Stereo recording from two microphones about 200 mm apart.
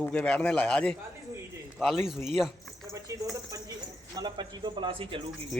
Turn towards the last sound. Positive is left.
turn(degrees=-25)  # may be behind; listen again after turning